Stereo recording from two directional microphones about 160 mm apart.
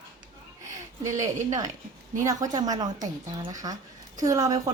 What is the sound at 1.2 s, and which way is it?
A woman's voice, 20° right (ahead or behind).